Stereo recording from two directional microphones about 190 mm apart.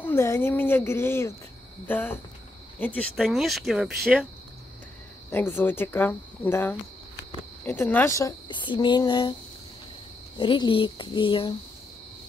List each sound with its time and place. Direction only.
0.0 s speech: 15° left (ahead or behind)
5.3 s speech: 10° left (ahead or behind)
10.3 s speech: 25° left (ahead or behind)